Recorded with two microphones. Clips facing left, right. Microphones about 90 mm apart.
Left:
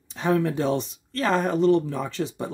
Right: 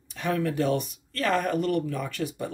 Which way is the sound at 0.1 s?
25° left (ahead or behind).